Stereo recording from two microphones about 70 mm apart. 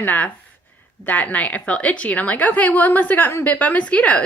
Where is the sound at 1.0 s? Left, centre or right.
Left.